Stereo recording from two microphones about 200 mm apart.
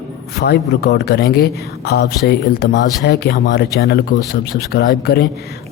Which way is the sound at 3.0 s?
55° left (ahead or behind).